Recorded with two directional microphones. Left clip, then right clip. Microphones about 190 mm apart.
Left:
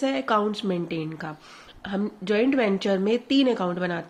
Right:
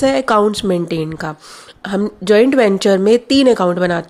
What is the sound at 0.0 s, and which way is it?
Speech, 55° right (ahead or behind).